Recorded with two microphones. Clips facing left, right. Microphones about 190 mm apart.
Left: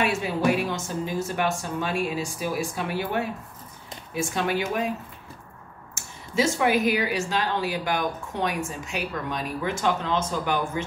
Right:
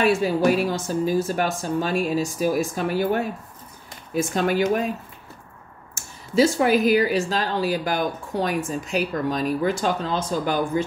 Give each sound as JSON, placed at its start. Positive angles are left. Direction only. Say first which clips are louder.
{"t": 0.0, "sound": "a woman's voice", "louder": "right 5 dB", "side_deg": -35}
{"t": 6.3, "sound": "a woman's voice", "louder": "right 4 dB", "side_deg": -35}